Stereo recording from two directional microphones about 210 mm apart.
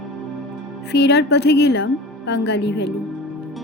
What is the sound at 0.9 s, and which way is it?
A woman's voice, 55° left (ahead or behind).